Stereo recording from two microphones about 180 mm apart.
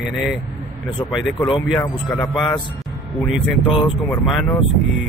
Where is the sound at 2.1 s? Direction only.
5° left (ahead or behind).